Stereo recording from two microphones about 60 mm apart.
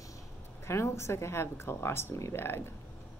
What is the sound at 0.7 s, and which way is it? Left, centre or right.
Speech, left.